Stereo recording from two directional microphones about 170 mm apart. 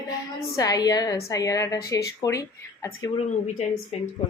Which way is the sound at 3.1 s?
40° left (ahead or behind).